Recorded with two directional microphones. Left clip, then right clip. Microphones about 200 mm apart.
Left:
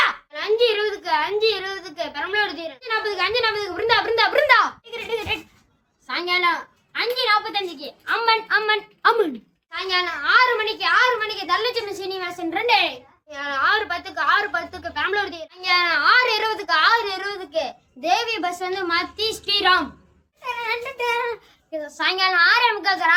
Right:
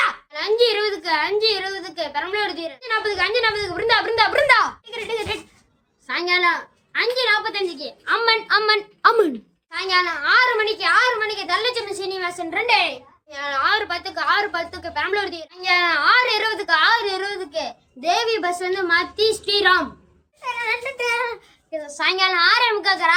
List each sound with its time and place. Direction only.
0.0 s a woman's voice: 10° right (ahead or behind)
9.7 s a child's voice: 10° right (ahead or behind)